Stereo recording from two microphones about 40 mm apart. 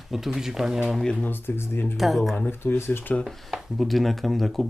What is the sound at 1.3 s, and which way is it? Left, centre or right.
Speech, left.